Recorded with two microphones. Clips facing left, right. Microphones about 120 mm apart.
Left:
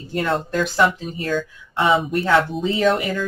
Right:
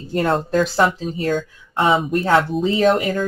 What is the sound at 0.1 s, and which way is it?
Speech, 35° right (ahead or behind).